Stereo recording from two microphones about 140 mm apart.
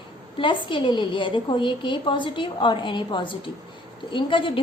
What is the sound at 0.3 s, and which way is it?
A woman's voice, 35° left (ahead or behind).